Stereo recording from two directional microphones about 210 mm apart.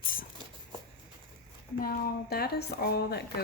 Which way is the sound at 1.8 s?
45° left (ahead or behind).